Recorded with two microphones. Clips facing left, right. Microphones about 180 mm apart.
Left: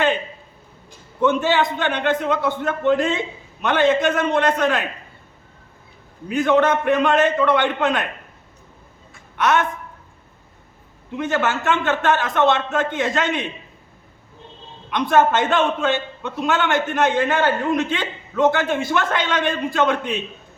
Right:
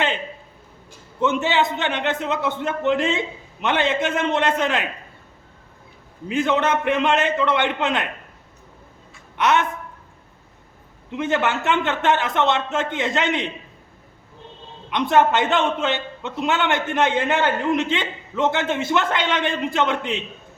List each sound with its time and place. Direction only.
1.2 s a man's voice: 20° right (ahead or behind)
6.3 s a man's voice: 20° right (ahead or behind)
9.4 s a man's voice: 20° right (ahead or behind)
11.2 s a man's voice: 20° right (ahead or behind)
14.8 s a man's voice: 20° right (ahead or behind)